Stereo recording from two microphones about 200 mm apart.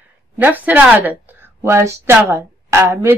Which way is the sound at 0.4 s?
10° right (ahead or behind).